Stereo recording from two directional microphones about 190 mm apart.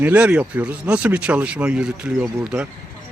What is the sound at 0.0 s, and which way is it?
Speech, 5° right (ahead or behind).